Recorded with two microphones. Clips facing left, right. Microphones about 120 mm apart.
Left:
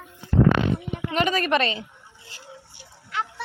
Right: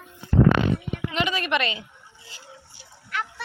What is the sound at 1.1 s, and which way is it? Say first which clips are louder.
Speech: left 4 dB; 45° left (ahead or behind).